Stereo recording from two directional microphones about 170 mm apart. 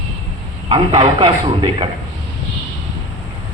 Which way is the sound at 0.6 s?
30° right (ahead or behind).